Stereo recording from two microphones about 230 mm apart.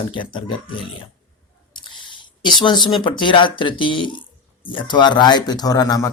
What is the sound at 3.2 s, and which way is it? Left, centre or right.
Speech, left.